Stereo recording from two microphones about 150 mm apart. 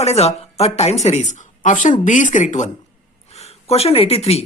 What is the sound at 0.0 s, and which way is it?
A woman's voice, 45° left (ahead or behind).